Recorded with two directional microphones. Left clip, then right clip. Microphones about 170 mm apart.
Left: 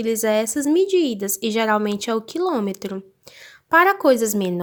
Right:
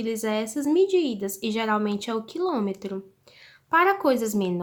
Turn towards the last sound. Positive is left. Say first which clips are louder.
# left 6 dB
turn(degrees=35)  # may be behind; listen again after turning